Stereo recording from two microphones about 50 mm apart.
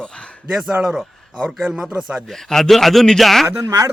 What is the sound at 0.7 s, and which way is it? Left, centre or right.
A man's voice, centre.